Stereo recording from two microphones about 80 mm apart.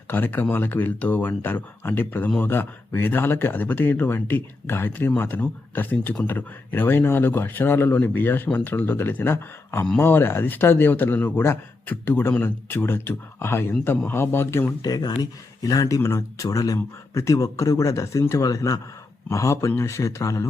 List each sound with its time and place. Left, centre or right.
0.1 s speech: left
14.8 s speech: left